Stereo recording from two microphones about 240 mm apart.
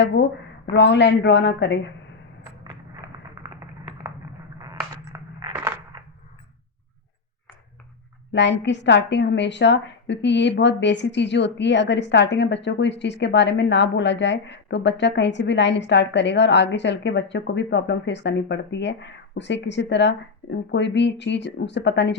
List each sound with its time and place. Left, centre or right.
0.8 s a woman's voice: left
4.6 s a sound: centre
8.3 s a woman's voice: left